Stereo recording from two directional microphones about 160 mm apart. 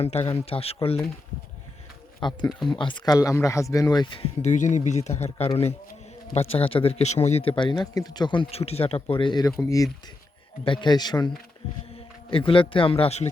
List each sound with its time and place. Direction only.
0.0 s speech: 40° left (ahead or behind)
2.2 s speech: 30° left (ahead or behind)
4.4 s speech: 50° left (ahead or behind); by 11.3 s 25° left (ahead or behind)
12.3 s speech: 35° left (ahead or behind)